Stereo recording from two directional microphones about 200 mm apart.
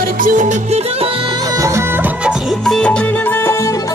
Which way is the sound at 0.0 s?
40° right (ahead or behind).